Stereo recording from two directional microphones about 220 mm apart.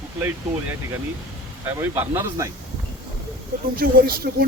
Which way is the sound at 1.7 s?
10° right (ahead or behind).